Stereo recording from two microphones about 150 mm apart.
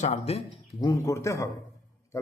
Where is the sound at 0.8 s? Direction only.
20° left (ahead or behind).